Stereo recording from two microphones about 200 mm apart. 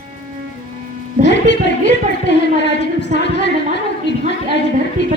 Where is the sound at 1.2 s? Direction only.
60° left (ahead or behind).